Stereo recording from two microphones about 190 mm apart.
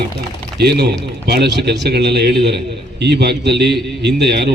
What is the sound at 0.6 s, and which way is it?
A man's voice, 60° right (ahead or behind).